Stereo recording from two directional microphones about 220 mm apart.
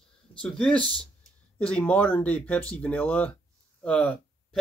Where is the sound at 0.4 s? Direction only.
5° left (ahead or behind).